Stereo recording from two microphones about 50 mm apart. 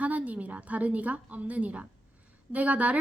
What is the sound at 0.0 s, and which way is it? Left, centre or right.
A woman's voice, right.